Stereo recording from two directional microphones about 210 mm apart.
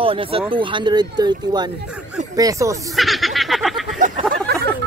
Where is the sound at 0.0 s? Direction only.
25° right (ahead or behind).